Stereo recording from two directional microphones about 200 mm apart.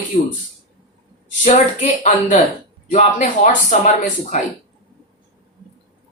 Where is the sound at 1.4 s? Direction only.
35° left (ahead or behind).